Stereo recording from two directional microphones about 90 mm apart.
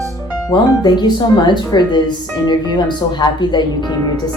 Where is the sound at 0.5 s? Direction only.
55° left (ahead or behind).